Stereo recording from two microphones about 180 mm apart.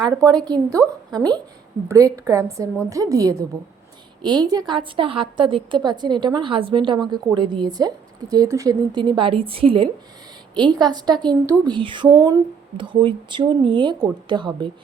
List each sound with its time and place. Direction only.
0.0 s a woman's voice: 20° right (ahead or behind)